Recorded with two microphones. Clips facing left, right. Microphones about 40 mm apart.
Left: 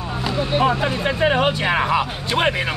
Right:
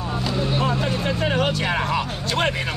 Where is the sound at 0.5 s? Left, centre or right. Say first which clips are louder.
Left 6 dB; left.